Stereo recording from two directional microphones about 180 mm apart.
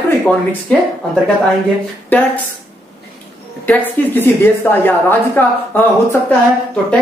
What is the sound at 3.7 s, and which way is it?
A woman's voice, 10° left (ahead or behind).